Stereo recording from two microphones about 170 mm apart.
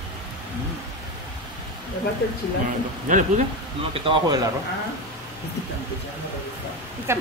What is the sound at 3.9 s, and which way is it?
Speech, 30° right (ahead or behind).